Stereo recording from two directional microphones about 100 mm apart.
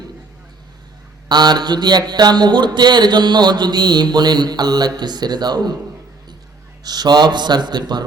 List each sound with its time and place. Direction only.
1.3 s speech: 45° right (ahead or behind)
6.8 s speech: 40° right (ahead or behind)